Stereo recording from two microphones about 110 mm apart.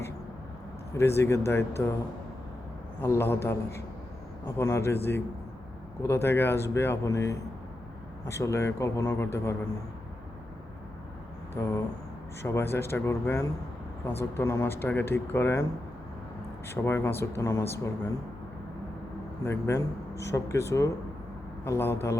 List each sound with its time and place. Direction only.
0.9 s speech: 25° left (ahead or behind)
3.0 s speech: 20° left (ahead or behind)
6.0 s speech: 20° left (ahead or behind)
11.5 s speech: 25° left (ahead or behind)
16.6 s speech: 25° left (ahead or behind)
19.5 s speech: 25° left (ahead or behind)